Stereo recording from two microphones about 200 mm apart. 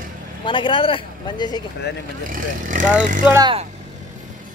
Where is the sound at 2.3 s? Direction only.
40° right (ahead or behind).